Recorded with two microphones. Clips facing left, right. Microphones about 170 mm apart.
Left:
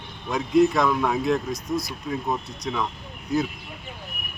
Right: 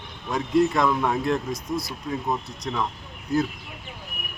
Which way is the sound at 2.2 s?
Centre (ahead or behind).